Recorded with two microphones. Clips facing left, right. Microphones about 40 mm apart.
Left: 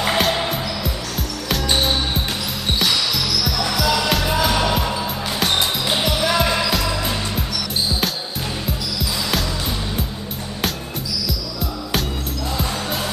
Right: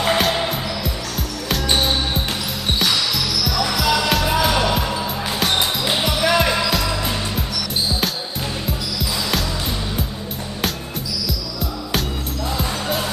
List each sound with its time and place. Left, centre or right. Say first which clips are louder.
0.0 s music: right 1 dB; centre
5.9 s basketball bounce: even; centre
6.2 s music: right 3 dB; centre